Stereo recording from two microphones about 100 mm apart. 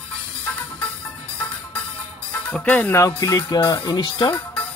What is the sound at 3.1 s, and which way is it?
Speech, 45° left (ahead or behind).